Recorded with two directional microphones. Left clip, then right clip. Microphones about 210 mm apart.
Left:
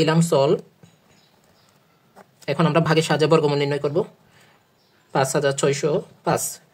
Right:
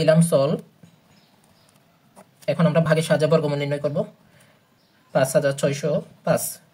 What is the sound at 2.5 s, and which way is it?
Speech, 35° left (ahead or behind).